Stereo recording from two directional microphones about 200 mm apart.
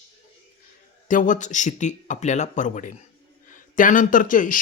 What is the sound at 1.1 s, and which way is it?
A man's voice, 40° left (ahead or behind).